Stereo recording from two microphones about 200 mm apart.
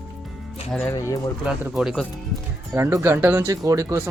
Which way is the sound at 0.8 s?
15° left (ahead or behind).